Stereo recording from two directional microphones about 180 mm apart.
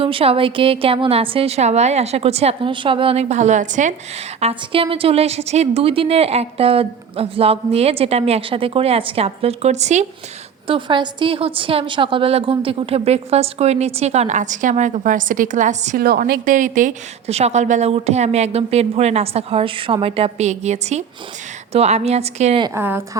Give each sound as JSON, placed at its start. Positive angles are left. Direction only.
{"t": 0.0, "sound": "a woman's voice", "side_deg": -30}
{"t": 4.4, "sound": "a woman's voice", "side_deg": -30}
{"t": 10.7, "sound": "a woman's voice", "side_deg": -25}
{"t": 16.0, "sound": "a woman's voice", "side_deg": -60}
{"t": 22.6, "sound": "speech", "side_deg": -15}